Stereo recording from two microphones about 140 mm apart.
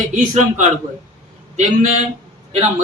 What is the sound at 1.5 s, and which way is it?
Speech, 60° right (ahead or behind).